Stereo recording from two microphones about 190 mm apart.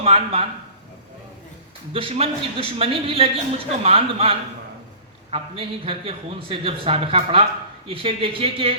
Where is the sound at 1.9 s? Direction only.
30° right (ahead or behind).